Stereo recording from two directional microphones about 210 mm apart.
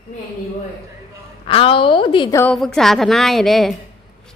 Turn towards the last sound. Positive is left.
turn(degrees=0)  # may be behind; listen again after turning